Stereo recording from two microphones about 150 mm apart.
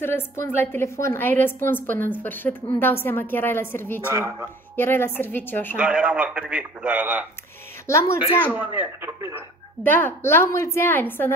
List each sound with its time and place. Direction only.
0.0 s a woman's voice: 15° left (ahead or behind)
4.1 s speech: 20° right (ahead or behind)
4.7 s a woman's voice: 15° left (ahead or behind)
5.8 s a man's voice: 5° right (ahead or behind)
7.8 s a woman's voice: 20° left (ahead or behind)
8.5 s a man's voice: 15° right (ahead or behind)
9.8 s a woman's voice: 10° left (ahead or behind)